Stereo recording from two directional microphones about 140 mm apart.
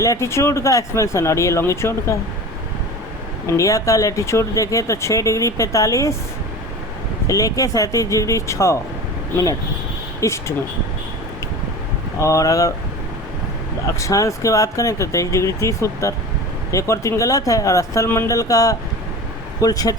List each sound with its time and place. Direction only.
0.0 s speech: 20° left (ahead or behind)
3.4 s speech: 25° left (ahead or behind)
7.3 s speech: 25° left (ahead or behind)
10.2 s speech: 20° left (ahead or behind)
12.2 s speech: 25° left (ahead or behind)
14.0 s speech: 20° left (ahead or behind)